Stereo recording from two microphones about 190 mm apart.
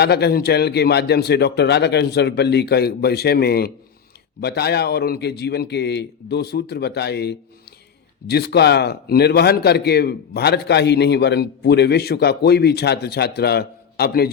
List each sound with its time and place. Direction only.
0.0 s a man's voice: 60° left (ahead or behind)